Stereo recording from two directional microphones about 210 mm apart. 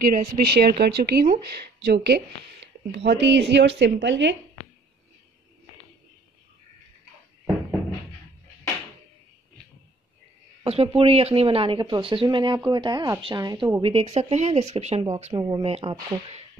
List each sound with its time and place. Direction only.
0.0 s speech: 45° right (ahead or behind); by 4.4 s 60° right (ahead or behind)
10.6 s speech: 25° right (ahead or behind)